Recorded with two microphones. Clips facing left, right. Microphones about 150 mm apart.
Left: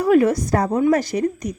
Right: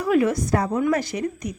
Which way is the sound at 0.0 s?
45° left (ahead or behind).